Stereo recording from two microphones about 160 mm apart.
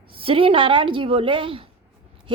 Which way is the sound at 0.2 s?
35° right (ahead or behind).